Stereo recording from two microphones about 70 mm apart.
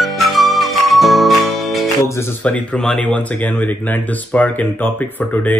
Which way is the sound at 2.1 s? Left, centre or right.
Left.